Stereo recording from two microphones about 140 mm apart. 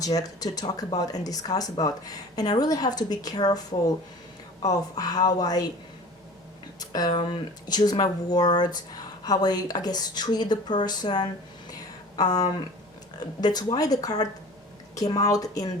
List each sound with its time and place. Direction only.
0.0 s speech: 25° left (ahead or behind)
6.7 s speech: 30° left (ahead or behind)
11.7 s a sound: 30° left (ahead or behind)
13.1 s speech: 30° left (ahead or behind)